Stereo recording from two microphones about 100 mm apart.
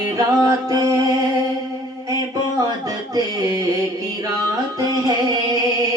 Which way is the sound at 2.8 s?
40° right (ahead or behind).